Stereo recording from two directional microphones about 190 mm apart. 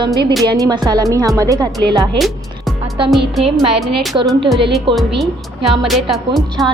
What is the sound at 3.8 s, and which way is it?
Speech, centre (ahead or behind).